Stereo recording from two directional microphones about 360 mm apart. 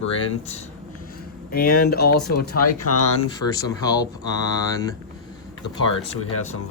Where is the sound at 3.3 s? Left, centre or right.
Centre.